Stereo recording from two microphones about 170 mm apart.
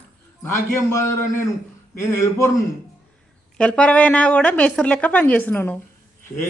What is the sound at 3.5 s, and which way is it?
A woman's voice, 5° left (ahead or behind).